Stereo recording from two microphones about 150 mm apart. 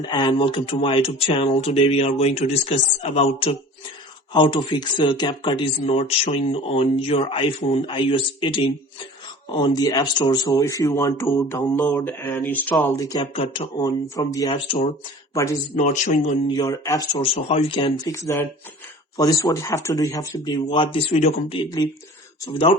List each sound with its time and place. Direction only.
0.0 s speech: 30° left (ahead or behind)
11.3 s mantra: 15° left (ahead or behind)
13.1 s speech: 35° left (ahead or behind)
13.7 s speech: 25° left (ahead or behind)
15.7 s speech: 55° left (ahead or behind)
16.5 s speech: 25° left (ahead or behind)
17.3 s speech: 40° left (ahead or behind)